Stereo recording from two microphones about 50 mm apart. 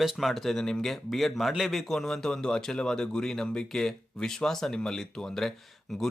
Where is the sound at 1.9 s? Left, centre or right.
Centre.